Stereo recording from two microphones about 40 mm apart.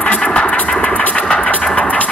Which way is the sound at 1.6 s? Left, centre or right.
Centre.